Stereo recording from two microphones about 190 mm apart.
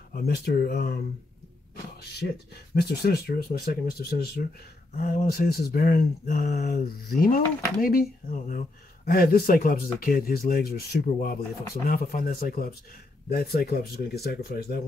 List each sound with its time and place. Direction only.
0.1 s speech: 55° left (ahead or behind)
2.0 s speech: 60° left (ahead or behind)